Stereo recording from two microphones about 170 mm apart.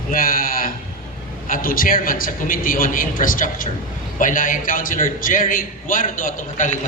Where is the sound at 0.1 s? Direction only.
55° left (ahead or behind).